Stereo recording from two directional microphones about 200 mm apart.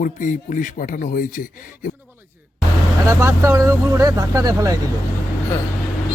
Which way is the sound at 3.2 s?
15° right (ahead or behind).